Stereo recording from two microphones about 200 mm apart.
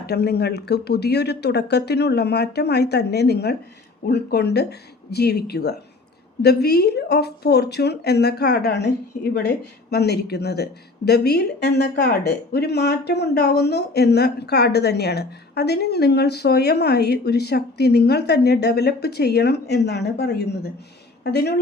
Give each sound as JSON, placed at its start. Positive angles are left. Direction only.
{"t": 0.0, "sound": "a woman's voice", "side_deg": 55}